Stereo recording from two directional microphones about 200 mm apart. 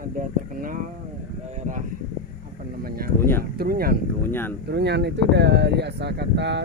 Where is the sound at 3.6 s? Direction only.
50° right (ahead or behind).